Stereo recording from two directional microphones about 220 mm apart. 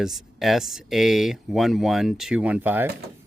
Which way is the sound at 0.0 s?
Centre (ahead or behind).